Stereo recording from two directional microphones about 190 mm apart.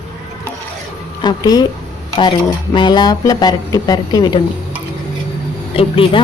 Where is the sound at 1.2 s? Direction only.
20° left (ahead or behind).